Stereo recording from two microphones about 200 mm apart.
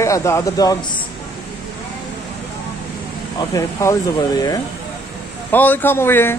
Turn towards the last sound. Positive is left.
turn(degrees=10)  # may be behind; listen again after turning